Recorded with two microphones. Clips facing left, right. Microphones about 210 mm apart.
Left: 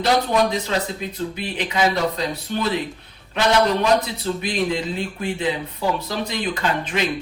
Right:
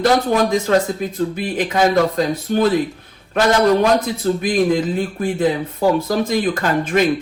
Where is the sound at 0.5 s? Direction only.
50° right (ahead or behind).